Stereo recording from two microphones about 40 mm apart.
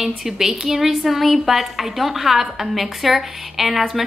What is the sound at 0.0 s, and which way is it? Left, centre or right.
A woman's voice, centre.